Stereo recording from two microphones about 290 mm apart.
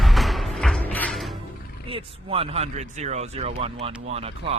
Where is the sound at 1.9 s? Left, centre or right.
Centre.